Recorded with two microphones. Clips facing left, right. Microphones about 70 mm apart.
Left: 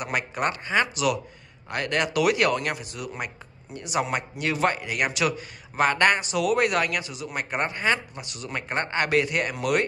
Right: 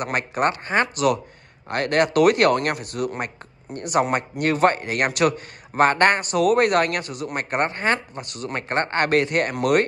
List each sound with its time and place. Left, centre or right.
0.0 s speech: right